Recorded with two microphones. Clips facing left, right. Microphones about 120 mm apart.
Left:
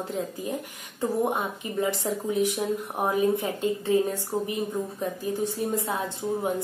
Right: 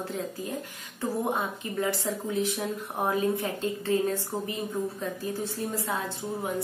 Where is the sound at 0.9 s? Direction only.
15° left (ahead or behind).